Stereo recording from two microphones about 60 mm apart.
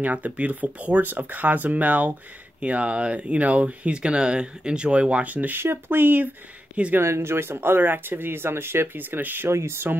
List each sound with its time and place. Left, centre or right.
0.0 s speech: right
5.6 s speech: right
9.5 s speech: right